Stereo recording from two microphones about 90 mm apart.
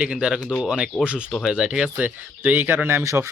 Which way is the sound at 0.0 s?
10° right (ahead or behind).